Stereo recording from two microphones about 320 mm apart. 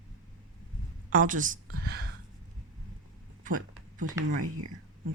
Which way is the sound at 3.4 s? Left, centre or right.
Right.